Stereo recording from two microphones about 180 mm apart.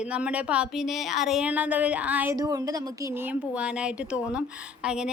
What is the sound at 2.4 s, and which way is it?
A woman's voice, 20° right (ahead or behind).